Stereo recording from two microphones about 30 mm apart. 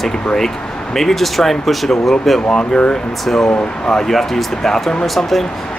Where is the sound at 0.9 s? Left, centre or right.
Centre.